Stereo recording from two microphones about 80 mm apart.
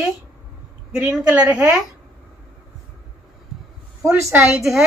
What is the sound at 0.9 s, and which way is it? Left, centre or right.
Speech, centre.